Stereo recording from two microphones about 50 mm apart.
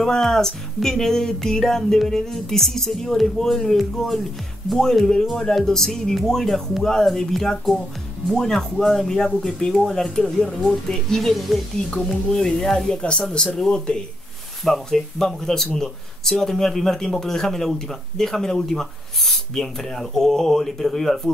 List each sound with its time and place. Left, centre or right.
0.0 s speech: centre
11.9 s speech: centre
14.6 s speech: centre